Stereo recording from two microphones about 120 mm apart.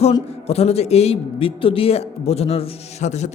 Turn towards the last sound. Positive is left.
turn(degrees=75)  # may be behind; listen again after turning